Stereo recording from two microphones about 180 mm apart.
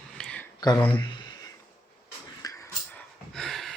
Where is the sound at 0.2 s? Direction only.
5° left (ahead or behind).